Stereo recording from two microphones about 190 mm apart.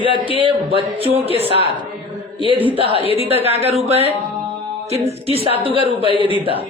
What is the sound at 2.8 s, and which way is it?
Speech, 30° right (ahead or behind).